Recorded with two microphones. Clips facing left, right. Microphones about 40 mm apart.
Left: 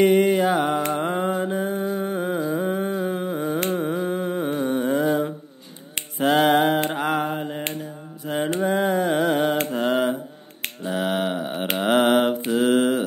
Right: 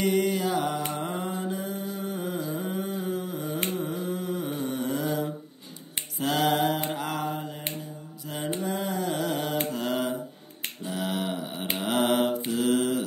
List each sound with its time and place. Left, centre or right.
0.0 s mantra: left
0.9 s music: left
3.7 s humming: left
6.1 s finger snapping: left
6.9 s mantra: left
8.5 s a sound: left
9.7 s mantra: left